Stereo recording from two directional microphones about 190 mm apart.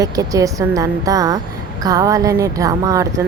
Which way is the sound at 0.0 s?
20° right (ahead or behind).